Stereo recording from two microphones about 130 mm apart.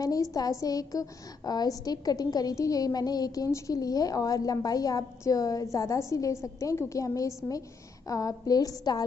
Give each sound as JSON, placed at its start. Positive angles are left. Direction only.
{"t": 0.0, "sound": "a woman's voice", "side_deg": 25}